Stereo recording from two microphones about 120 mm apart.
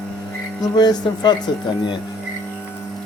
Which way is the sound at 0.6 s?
35° left (ahead or behind).